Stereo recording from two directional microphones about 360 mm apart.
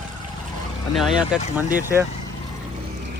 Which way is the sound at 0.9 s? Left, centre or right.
Centre.